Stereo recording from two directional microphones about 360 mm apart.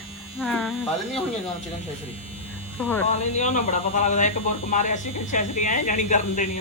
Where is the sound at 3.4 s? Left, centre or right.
Centre.